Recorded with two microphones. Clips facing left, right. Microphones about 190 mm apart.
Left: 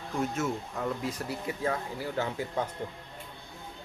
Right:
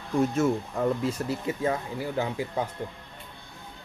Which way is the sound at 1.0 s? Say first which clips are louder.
Right 5 dB; 25° right (ahead or behind).